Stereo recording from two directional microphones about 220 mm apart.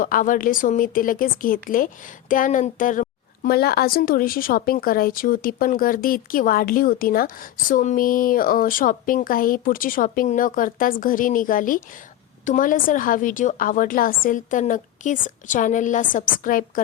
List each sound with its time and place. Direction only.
0.0 s a woman's voice: 40° left (ahead or behind)